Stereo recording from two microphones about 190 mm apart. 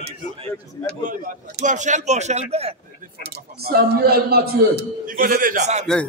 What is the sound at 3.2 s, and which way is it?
A man's voice, 55° right (ahead or behind).